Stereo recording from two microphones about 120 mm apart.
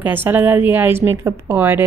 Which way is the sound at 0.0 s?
15° right (ahead or behind).